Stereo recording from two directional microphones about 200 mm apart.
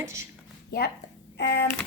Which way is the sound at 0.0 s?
15° right (ahead or behind).